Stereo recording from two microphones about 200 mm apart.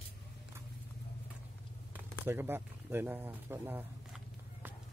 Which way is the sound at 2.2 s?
10° right (ahead or behind).